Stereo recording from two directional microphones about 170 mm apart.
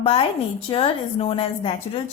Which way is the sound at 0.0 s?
35° left (ahead or behind).